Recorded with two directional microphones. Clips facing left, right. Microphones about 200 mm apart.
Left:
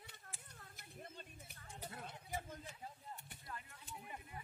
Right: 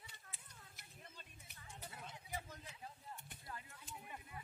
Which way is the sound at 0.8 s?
45° left (ahead or behind).